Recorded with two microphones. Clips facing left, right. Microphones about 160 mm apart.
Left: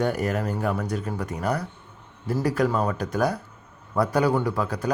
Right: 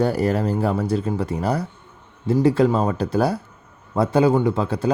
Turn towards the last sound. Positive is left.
turn(degrees=-25)  # may be behind; listen again after turning